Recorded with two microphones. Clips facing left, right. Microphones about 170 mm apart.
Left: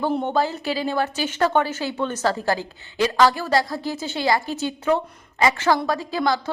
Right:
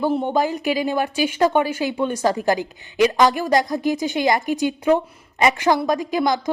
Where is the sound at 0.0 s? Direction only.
5° right (ahead or behind).